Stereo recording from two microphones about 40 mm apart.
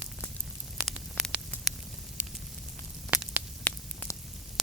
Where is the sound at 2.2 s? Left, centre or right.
Right.